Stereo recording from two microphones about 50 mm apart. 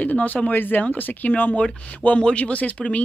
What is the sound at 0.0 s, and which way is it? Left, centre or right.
Speech, left.